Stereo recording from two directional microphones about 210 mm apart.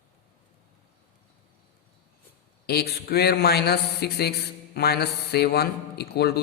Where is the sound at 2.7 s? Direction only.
50° left (ahead or behind).